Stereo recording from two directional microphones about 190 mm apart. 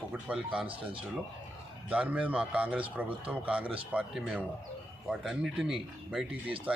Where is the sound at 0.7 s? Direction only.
25° right (ahead or behind).